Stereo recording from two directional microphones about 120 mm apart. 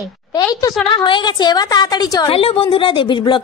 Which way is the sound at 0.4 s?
30° left (ahead or behind).